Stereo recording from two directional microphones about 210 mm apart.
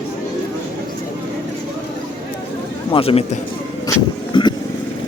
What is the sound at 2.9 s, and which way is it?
Speech, 25° left (ahead or behind).